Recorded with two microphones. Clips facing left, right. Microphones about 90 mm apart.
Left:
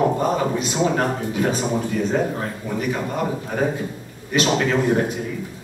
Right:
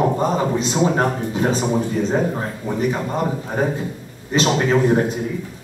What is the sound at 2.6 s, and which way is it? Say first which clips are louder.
Speech: right 3 dB; 25° right (ahead or behind).